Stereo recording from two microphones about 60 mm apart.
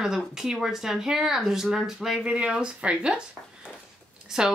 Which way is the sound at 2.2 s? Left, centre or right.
Centre.